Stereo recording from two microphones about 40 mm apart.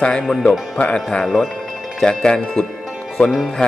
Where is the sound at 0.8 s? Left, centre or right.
Left.